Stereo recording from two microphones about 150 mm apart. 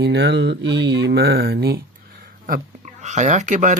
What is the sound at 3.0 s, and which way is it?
Speech, 50° right (ahead or behind).